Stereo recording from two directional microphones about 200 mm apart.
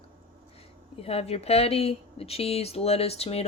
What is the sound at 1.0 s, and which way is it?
Speech, 30° left (ahead or behind).